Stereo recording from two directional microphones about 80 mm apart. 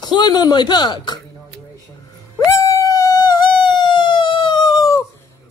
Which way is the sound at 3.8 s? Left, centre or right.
Left.